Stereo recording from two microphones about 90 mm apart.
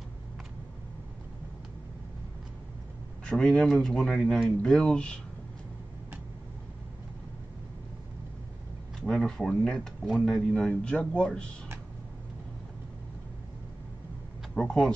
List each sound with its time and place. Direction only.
3.3 s speech: 10° left (ahead or behind)
9.0 s speech: 5° left (ahead or behind)
14.5 s speech: 10° left (ahead or behind)